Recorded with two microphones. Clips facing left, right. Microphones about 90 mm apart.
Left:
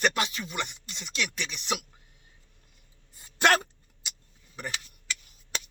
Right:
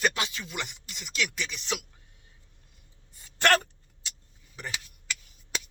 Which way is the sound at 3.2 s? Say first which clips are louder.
Left 1 dB; 15° left (ahead or behind).